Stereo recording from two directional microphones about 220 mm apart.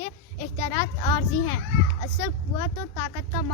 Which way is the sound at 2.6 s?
15° left (ahead or behind).